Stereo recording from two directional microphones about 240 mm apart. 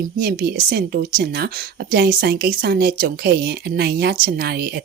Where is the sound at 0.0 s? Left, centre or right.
Right.